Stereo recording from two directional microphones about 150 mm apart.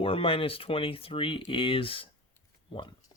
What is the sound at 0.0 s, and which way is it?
Speech, 40° left (ahead or behind).